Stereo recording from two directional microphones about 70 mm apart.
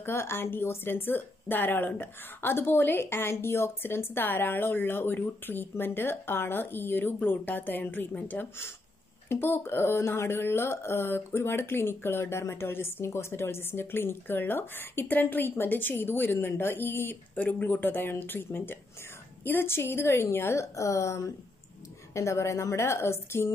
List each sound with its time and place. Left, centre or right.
0.0 s speech: left